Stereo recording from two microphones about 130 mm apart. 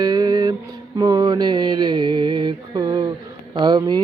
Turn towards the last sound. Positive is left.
turn(degrees=-35)  # may be behind; listen again after turning